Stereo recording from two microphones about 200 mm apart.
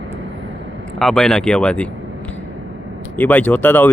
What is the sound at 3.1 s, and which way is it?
Speech, 10° left (ahead or behind).